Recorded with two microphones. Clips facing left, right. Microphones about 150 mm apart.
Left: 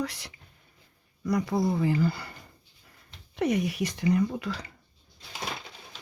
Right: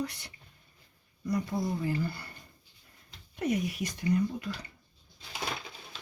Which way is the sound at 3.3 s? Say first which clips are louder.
Left 4 dB; 80° left.